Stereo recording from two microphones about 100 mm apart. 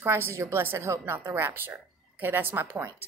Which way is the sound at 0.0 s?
25° right (ahead or behind).